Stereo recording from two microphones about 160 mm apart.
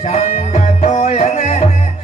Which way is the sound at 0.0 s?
40° left (ahead or behind).